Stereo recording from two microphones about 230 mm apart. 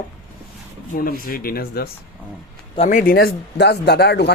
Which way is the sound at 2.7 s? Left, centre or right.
Left.